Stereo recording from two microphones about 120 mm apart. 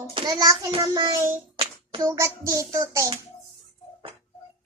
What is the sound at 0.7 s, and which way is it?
Speech, 35° right (ahead or behind).